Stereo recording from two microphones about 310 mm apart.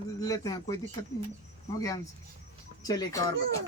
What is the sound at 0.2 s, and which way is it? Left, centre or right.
Speech, centre.